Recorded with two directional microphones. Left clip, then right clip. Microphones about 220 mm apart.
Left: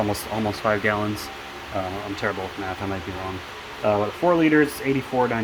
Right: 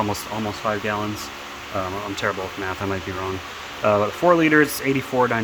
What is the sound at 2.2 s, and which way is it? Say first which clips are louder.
Speech: right 2 dB; 20° right (ahead or behind).